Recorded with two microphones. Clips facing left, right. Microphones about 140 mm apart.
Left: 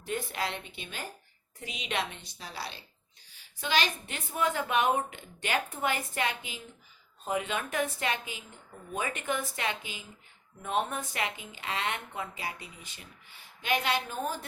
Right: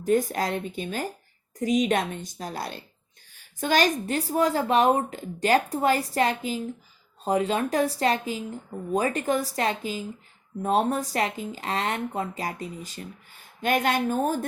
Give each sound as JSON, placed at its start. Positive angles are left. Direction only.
{"t": 0.0, "sound": "speech", "side_deg": -40}